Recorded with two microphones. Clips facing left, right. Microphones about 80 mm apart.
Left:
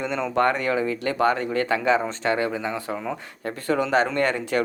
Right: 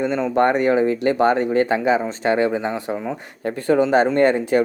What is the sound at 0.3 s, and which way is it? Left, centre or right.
Speech, right.